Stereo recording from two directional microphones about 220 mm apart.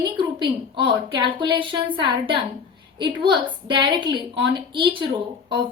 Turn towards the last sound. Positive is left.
turn(degrees=-20)  # may be behind; listen again after turning